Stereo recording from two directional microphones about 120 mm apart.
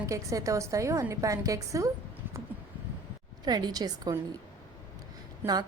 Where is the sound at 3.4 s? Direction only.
35° right (ahead or behind).